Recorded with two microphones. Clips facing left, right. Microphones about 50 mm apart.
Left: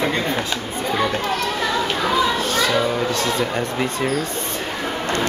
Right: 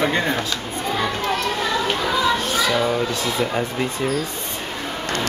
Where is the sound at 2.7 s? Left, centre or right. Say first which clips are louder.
Even; centre.